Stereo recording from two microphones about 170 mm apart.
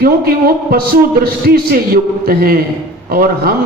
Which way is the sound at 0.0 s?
60° right (ahead or behind).